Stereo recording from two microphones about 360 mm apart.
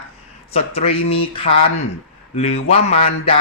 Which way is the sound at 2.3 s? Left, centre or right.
Centre.